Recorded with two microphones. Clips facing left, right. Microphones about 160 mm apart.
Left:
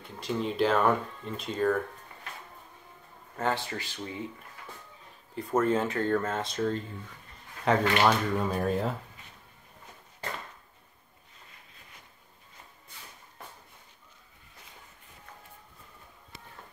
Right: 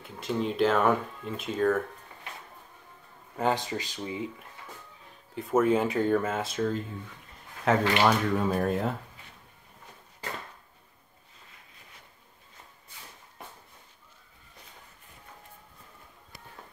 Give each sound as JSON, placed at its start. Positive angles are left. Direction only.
{"t": 0.0, "sound": "speech", "side_deg": 0}
{"t": 3.3, "sound": "speech", "side_deg": -15}
{"t": 5.3, "sound": "speech", "side_deg": -5}
{"t": 7.6, "sound": "speech", "side_deg": 0}